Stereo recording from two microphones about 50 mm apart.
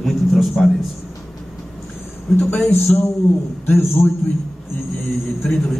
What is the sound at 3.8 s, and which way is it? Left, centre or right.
Speech, left.